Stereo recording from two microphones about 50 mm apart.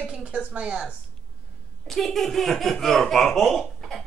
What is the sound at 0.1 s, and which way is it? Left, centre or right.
Speech, right.